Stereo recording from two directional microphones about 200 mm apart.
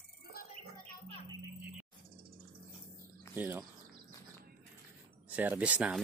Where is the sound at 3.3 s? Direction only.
10° right (ahead or behind).